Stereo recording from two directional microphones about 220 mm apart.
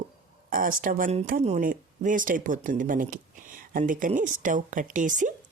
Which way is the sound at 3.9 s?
35° right (ahead or behind).